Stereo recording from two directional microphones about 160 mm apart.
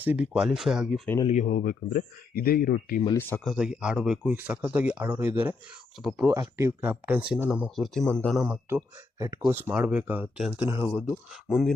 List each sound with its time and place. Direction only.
0.0 s speech: 10° right (ahead or behind)
1.3 s speech: 50° left (ahead or behind); by 3.0 s 65° left (ahead or behind)
3.2 s speech: 15° left (ahead or behind)
3.4 s speech: 5° right (ahead or behind)
6.2 s speech: 15° right (ahead or behind); by 8.4 s 5° left (ahead or behind)
8.4 s speech: 15° right (ahead or behind)
11.4 s speech: centre (ahead or behind)